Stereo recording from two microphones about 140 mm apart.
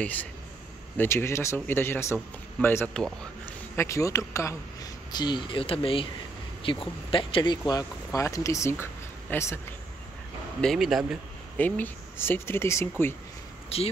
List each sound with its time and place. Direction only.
0.0 s a man's voice: 10° left (ahead or behind)
2.9 s speech: 5° left (ahead or behind)
3.7 s a man's voice: 20° left (ahead or behind)
10.6 s speech: centre (ahead or behind)
11.5 s speech: 10° left (ahead or behind)
13.7 s speech: 45° left (ahead or behind)